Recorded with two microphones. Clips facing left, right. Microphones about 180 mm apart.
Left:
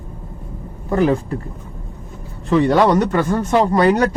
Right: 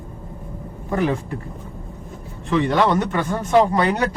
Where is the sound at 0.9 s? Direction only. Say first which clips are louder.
Left 5 dB; 35° left (ahead or behind).